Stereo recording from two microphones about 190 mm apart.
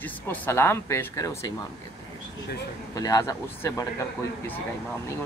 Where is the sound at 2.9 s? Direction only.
20° left (ahead or behind).